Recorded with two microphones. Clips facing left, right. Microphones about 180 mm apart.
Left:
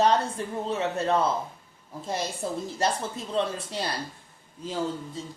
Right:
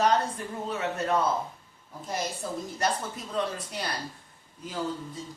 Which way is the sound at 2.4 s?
30° left (ahead or behind).